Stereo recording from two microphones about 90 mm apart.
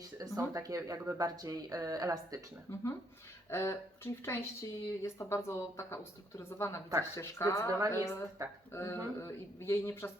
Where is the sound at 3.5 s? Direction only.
30° left (ahead or behind).